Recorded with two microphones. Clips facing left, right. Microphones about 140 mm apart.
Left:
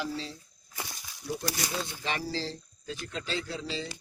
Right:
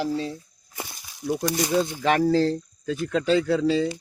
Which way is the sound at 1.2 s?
60° right (ahead or behind).